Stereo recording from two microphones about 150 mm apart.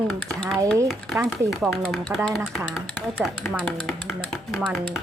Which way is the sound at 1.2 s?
20° right (ahead or behind).